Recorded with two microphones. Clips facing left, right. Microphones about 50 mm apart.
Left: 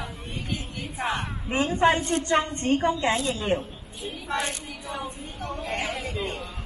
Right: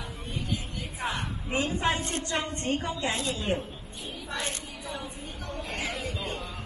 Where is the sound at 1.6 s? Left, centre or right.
Left.